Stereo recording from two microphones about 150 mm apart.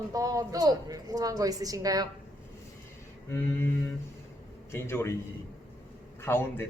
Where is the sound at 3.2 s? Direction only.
15° left (ahead or behind).